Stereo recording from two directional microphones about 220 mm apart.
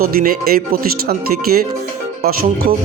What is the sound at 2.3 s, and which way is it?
Speech, 40° right (ahead or behind).